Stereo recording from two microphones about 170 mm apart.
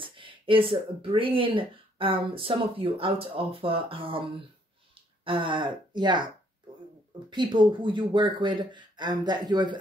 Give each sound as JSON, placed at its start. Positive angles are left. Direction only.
{"t": 0.0, "sound": "speech", "side_deg": -30}
{"t": 5.2, "sound": "speech", "side_deg": -30}
{"t": 7.2, "sound": "speech", "side_deg": -25}